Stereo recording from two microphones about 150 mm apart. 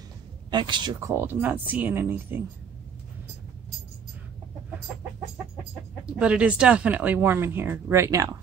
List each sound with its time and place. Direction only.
0.5 s speech: 30° right (ahead or behind)
0.9 s speech: 15° right (ahead or behind)
6.0 s speech: 5° right (ahead or behind)